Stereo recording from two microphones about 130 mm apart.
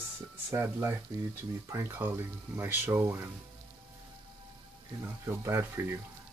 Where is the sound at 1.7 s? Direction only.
20° right (ahead or behind).